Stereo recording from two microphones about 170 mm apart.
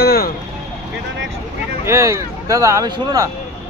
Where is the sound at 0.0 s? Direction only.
65° left (ahead or behind).